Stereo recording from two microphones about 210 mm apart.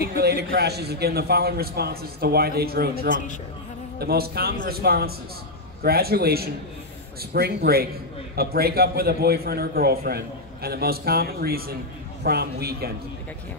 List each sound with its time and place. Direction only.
0.0 s a man's voice: 50° right (ahead or behind)